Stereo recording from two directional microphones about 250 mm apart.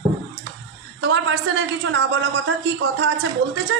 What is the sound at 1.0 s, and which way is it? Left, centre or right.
A woman's voice, right.